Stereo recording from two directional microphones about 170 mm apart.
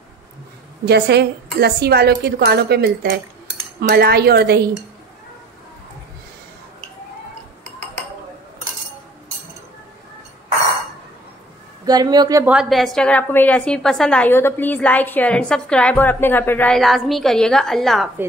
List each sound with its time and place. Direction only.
0.8 s a woman's voice: 75° right (ahead or behind)
3.8 s a woman's voice: 65° right (ahead or behind)
11.8 s speech: 25° right (ahead or behind)
12.4 s a woman's voice: centre (ahead or behind)